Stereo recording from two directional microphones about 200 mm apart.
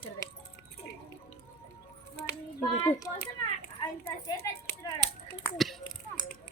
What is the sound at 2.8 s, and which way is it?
Speech, 10° left (ahead or behind).